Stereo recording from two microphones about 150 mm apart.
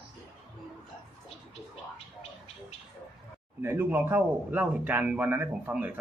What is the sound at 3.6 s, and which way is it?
A man's voice, 15° right (ahead or behind).